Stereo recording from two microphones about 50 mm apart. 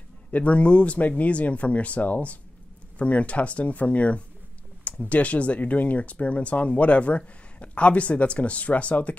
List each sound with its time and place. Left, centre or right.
0.3 s speech: left